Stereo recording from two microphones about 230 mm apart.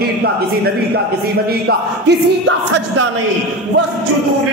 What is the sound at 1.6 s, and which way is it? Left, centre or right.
Music, right.